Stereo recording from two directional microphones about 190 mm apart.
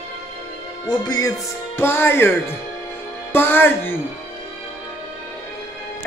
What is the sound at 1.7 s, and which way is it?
Music, 10° left (ahead or behind).